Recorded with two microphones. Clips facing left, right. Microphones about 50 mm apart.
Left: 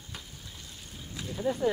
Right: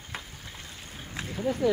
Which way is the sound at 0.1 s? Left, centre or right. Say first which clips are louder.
Right 5 dB; right.